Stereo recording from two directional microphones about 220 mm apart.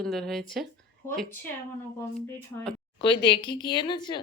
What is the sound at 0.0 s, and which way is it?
Speech, centre (ahead or behind).